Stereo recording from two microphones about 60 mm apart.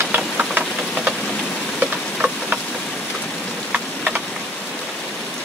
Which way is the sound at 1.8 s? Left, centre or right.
Right.